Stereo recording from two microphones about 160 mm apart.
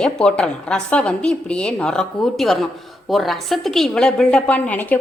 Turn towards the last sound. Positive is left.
turn(degrees=10)  # may be behind; listen again after turning